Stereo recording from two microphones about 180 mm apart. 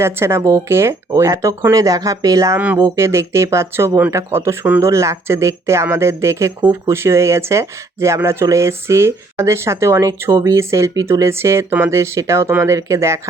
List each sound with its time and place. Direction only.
0.0 s speech: 15° right (ahead or behind)